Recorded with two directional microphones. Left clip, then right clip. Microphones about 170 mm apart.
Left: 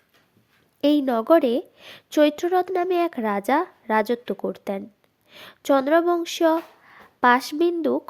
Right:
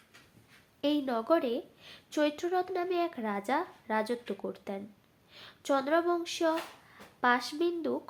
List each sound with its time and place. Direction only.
0.8 s a woman's voice: 55° left (ahead or behind)